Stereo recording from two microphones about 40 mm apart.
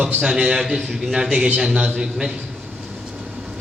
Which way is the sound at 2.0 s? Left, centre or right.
Centre.